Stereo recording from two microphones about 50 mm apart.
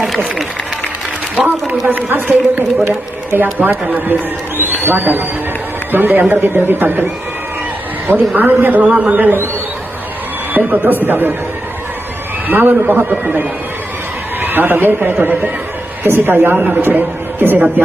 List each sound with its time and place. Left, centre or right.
1.9 s a man's voice: right
8.4 s a man's voice: right
10.5 s a man's voice: right
12.5 s a man's voice: right